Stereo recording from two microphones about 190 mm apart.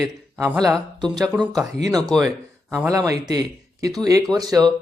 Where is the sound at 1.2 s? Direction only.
5° left (ahead or behind).